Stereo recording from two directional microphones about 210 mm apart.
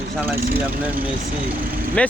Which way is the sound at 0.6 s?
10° right (ahead or behind).